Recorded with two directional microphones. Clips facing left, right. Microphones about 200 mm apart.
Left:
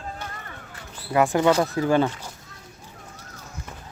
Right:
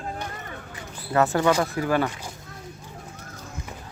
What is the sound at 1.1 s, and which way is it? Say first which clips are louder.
Speech: left 2 dB; 15° left (ahead or behind).